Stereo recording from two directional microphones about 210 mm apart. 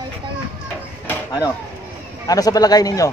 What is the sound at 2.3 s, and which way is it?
Speech, 15° left (ahead or behind).